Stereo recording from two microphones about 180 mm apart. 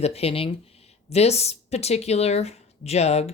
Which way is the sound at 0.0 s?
35° left (ahead or behind).